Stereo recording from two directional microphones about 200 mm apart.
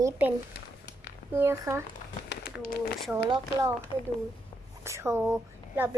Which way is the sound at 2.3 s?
50° left (ahead or behind).